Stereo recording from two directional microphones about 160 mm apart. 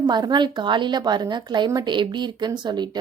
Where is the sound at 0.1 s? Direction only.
25° right (ahead or behind).